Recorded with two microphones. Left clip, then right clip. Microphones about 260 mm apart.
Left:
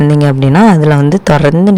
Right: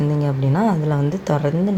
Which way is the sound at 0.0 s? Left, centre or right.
Left.